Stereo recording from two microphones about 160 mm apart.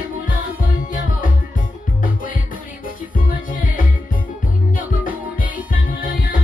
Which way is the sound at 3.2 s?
60° left (ahead or behind).